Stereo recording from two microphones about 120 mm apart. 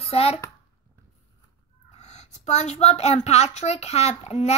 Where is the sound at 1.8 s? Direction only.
70° left (ahead or behind).